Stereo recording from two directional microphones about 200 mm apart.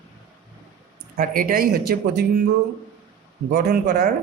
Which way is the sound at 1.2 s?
45° right (ahead or behind).